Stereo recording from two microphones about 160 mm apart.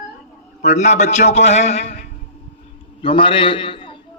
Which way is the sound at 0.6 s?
45° left (ahead or behind).